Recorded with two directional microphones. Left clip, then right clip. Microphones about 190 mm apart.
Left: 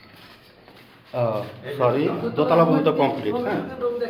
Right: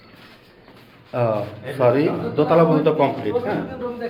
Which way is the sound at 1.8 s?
15° right (ahead or behind).